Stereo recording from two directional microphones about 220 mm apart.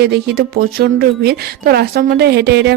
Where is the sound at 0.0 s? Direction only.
45° right (ahead or behind).